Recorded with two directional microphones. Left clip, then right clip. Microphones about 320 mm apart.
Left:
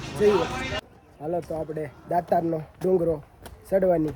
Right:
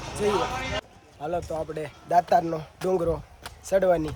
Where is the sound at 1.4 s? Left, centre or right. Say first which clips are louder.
Even; centre.